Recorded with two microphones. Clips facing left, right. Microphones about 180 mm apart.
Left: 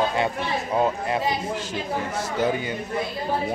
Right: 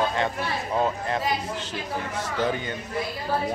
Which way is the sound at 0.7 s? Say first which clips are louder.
Left 2 dB; 10° left (ahead or behind).